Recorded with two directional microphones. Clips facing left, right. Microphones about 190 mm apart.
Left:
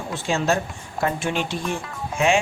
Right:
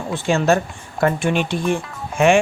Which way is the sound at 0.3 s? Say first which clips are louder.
Right 5 dB; 60° right (ahead or behind).